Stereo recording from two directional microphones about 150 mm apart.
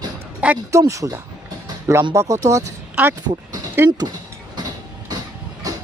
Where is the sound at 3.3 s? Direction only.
30° right (ahead or behind).